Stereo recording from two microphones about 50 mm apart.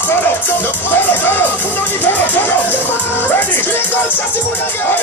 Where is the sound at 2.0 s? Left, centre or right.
Left.